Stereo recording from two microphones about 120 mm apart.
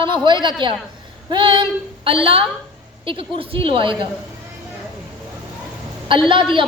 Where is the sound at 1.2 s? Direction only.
45° right (ahead or behind).